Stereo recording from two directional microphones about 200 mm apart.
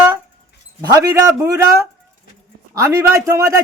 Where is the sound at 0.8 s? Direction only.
15° right (ahead or behind).